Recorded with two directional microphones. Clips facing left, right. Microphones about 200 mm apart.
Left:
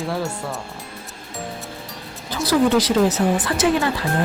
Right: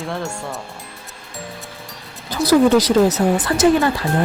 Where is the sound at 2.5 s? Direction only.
40° right (ahead or behind).